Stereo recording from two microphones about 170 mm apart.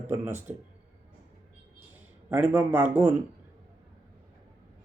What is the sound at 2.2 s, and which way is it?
Speech, 10° right (ahead or behind).